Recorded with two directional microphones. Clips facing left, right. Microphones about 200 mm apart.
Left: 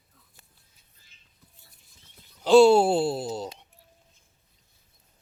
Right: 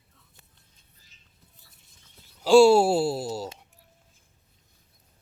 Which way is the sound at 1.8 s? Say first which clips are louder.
Even; centre (ahead or behind).